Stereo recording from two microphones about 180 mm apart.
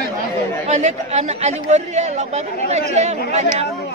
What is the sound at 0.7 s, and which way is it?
Speech, 40° right (ahead or behind).